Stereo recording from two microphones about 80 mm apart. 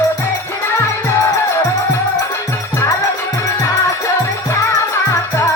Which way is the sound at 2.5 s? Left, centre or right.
Left.